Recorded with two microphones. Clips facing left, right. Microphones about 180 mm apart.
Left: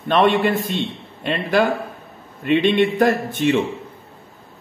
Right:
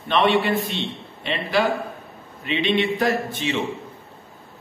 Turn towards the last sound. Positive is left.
turn(degrees=50)  # may be behind; listen again after turning